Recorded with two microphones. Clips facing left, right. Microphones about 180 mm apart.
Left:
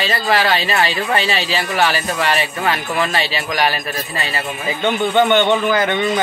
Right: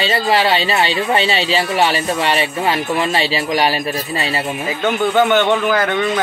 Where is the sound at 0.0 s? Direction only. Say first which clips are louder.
Right 2 dB; 30° right (ahead or behind).